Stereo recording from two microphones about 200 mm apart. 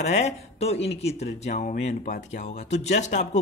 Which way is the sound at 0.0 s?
35° left (ahead or behind).